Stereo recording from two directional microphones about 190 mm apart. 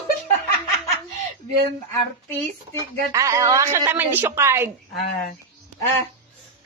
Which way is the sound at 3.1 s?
15° right (ahead or behind).